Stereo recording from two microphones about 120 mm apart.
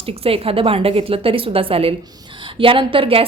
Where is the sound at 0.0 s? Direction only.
55° right (ahead or behind).